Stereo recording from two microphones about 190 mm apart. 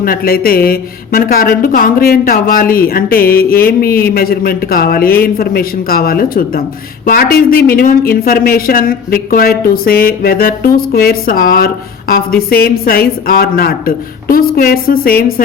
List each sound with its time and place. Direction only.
0.0 s speech: 50° left (ahead or behind)